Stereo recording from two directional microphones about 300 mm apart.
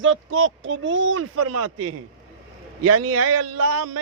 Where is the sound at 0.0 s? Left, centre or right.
Right.